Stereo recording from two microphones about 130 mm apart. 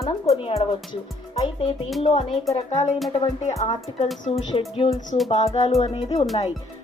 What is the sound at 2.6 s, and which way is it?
Music, 65° left (ahead or behind).